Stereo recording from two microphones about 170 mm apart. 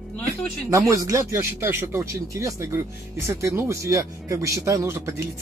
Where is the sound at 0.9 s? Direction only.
15° right (ahead or behind).